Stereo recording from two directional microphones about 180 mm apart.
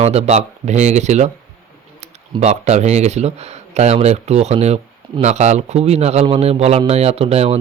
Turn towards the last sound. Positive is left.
turn(degrees=-35)  # may be behind; listen again after turning